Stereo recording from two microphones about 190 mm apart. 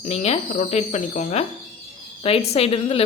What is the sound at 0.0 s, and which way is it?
A woman's voice, 35° left (ahead or behind).